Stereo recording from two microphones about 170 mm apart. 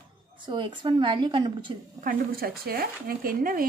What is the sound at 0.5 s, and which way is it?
A woman's voice, 30° right (ahead or behind).